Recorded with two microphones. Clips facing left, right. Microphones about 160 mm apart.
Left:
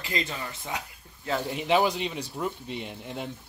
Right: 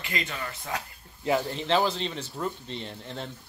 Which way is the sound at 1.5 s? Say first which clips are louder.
Left 2 dB; 10° left (ahead or behind).